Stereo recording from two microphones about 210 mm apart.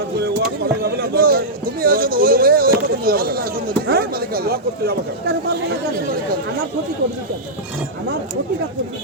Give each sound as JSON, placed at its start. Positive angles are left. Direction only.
{"t": 0.2, "sound": "speech", "side_deg": -50}